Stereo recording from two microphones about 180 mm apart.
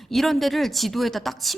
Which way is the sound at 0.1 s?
Centre (ahead or behind).